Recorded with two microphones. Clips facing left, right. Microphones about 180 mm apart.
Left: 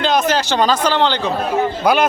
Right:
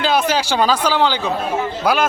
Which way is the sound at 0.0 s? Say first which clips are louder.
Left 1 dB; 5° right (ahead or behind).